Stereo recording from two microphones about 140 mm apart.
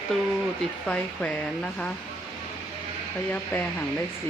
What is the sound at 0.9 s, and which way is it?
Speech, 10° left (ahead or behind).